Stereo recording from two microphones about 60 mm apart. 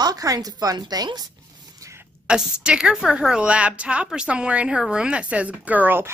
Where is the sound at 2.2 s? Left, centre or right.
Centre; by 6.0 s right.